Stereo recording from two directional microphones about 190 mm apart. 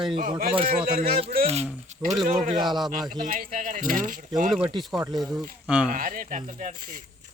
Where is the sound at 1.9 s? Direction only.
35° right (ahead or behind).